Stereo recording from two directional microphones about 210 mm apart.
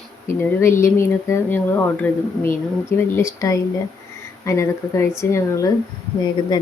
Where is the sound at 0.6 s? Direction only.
15° left (ahead or behind).